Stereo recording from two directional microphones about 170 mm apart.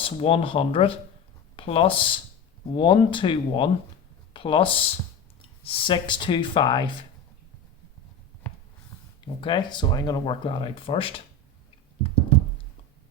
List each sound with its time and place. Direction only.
0.0 s speech: 35° left (ahead or behind)
9.2 s speech: 25° left (ahead or behind)